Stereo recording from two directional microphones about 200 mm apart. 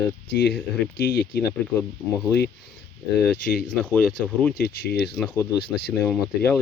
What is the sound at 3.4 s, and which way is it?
Speech, 45° left (ahead or behind).